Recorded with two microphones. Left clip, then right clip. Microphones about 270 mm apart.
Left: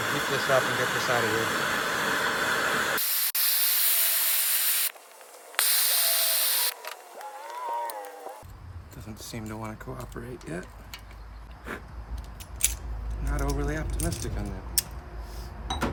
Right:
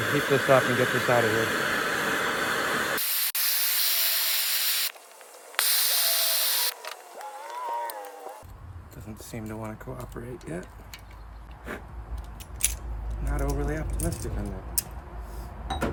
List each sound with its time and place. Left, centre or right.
0.0 s a sound: centre
5.5 s spray: centre
9.0 s speech: centre
11.7 s vehicle: centre
12.5 s scissors: centre
13.2 s speech: centre
15.4 s a sound: centre